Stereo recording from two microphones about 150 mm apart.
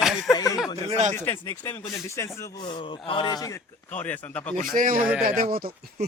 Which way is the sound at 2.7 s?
35° left (ahead or behind).